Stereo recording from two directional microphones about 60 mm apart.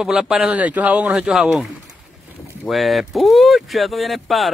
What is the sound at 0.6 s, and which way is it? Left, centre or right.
Speech, right.